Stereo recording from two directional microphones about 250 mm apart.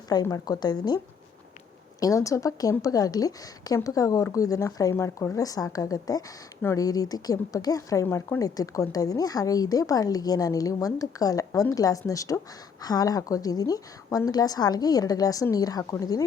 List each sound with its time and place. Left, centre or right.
0.1 s a woman's voice: centre